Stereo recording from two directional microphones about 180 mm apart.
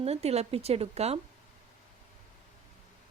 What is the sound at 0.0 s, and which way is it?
Speech, 35° right (ahead or behind).